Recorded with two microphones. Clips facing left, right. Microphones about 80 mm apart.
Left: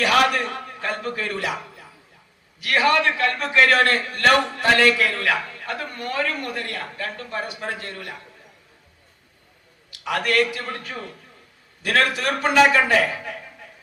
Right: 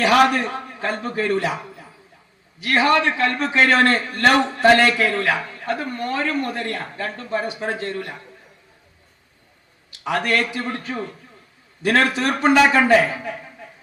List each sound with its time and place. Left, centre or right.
0.0 s a man's voice: right
2.6 s a man's voice: right
10.0 s a man's voice: right